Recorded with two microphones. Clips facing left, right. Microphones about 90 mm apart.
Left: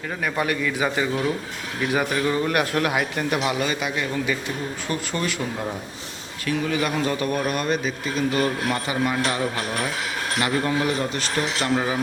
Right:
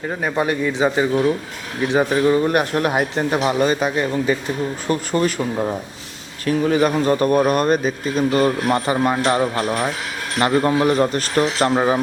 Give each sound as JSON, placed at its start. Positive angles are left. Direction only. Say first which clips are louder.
{"t": 0.2, "sound": "a man's voice", "louder": "right 4 dB", "side_deg": -25}